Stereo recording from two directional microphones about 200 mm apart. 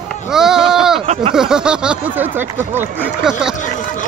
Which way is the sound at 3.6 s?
40° left (ahead or behind).